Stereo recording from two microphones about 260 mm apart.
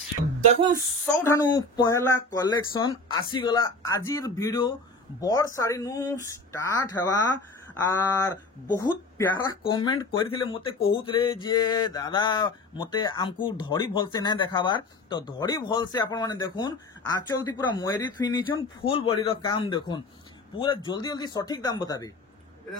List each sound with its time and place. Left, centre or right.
1.0 s speech: centre